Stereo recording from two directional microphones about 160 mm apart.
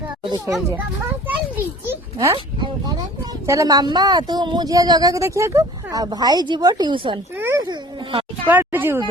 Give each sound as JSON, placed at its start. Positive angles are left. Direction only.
{"t": 0.3, "sound": "a child's voice", "side_deg": -20}
{"t": 1.3, "sound": "children playing", "side_deg": -10}
{"t": 2.3, "sound": "a sound", "side_deg": -30}
{"t": 3.4, "sound": "speech", "side_deg": -20}
{"t": 7.3, "sound": "a sound", "side_deg": -15}
{"t": 8.4, "sound": "speech", "side_deg": -10}